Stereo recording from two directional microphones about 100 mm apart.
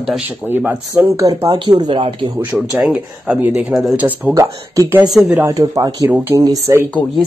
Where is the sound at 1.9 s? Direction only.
55° right (ahead or behind).